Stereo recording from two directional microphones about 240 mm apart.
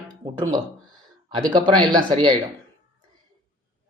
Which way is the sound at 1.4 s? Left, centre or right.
Centre.